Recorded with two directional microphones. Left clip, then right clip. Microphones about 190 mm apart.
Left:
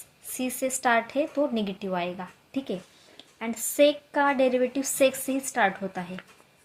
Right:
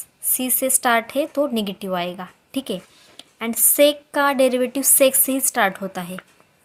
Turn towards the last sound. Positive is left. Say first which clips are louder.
# right 4 dB
turn(degrees=-45)  # may be behind; listen again after turning